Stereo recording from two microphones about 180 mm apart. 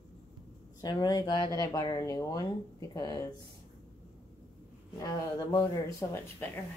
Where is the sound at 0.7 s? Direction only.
20° left (ahead or behind).